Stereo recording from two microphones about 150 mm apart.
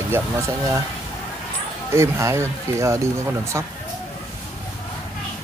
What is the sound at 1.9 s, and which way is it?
Speech, 20° right (ahead or behind).